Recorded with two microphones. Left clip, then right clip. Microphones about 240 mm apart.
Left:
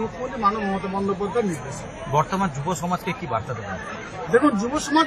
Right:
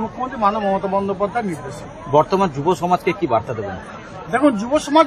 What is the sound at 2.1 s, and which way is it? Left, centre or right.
Speech, right.